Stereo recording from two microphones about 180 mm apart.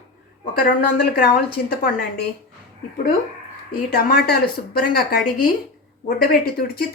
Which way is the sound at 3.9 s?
60° left (ahead or behind).